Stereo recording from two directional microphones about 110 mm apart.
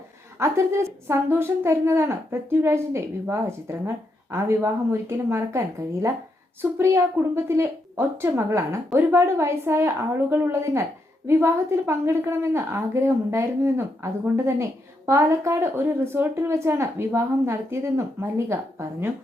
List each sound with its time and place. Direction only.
0.3 s a woman's voice: 25° right (ahead or behind)